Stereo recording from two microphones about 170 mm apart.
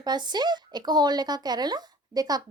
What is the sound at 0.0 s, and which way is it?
A woman's voice, 25° right (ahead or behind).